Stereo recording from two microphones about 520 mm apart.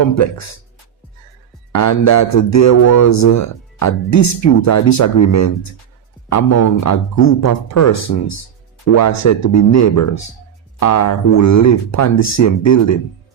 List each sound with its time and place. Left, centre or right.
0.0 s speech: left
1.7 s speech: left